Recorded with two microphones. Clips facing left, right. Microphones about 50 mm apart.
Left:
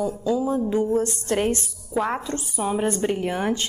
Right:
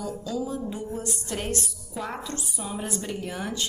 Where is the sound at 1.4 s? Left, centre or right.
Left.